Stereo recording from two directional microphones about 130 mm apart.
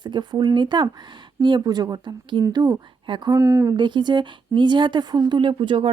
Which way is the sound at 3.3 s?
20° right (ahead or behind).